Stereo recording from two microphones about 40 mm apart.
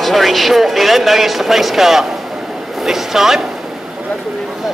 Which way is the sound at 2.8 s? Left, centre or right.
Centre.